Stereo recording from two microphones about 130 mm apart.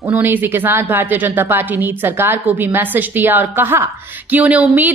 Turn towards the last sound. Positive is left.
turn(degrees=-10)  # may be behind; listen again after turning